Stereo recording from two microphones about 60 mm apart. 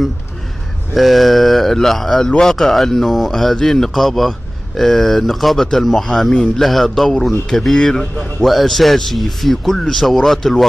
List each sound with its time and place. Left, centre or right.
0.9 s speech: centre
6.3 s a man's voice: centre
6.6 s speech: centre